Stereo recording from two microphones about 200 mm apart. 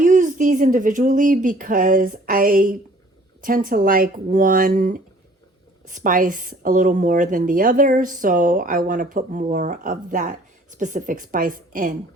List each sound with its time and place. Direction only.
0.0 s speech: 40° right (ahead or behind)